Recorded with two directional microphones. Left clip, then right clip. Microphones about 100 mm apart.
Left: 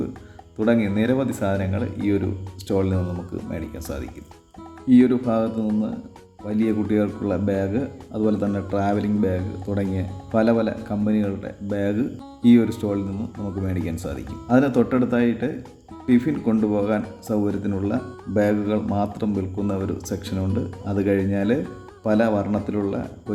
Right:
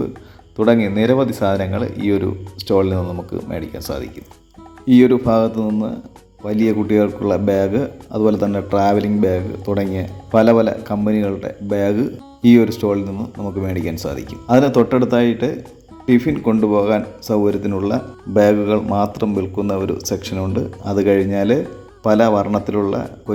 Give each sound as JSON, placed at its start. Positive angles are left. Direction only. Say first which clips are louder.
{"t": 0.6, "sound": "speech", "louder": "right 6 dB", "side_deg": -20}
{"t": 16.4, "sound": "speech", "louder": "right 6 dB", "side_deg": 0}
{"t": 16.6, "sound": "speech", "louder": "right 9 dB", "side_deg": -15}
{"t": 20.8, "sound": "speech", "louder": "right 7 dB", "side_deg": -15}